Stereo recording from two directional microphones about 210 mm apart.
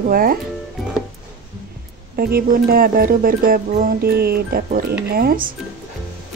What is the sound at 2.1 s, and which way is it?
Speech, 45° right (ahead or behind).